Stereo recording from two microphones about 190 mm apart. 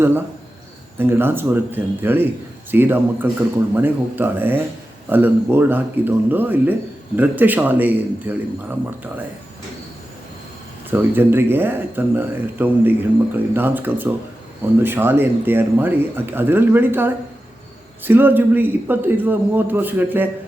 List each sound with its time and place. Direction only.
0.9 s speech: 10° right (ahead or behind)
10.9 s speech: 10° right (ahead or behind)